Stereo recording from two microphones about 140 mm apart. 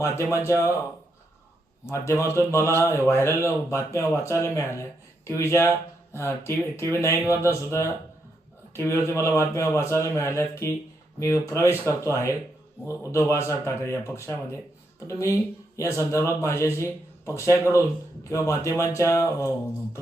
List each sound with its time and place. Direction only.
0.3 s speech: 20° left (ahead or behind)
1.9 s speech: 15° left (ahead or behind)